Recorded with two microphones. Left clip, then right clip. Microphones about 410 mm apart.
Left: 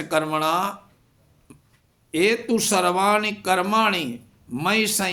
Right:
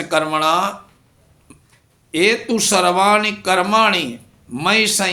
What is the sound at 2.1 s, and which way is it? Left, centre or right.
Speech, left.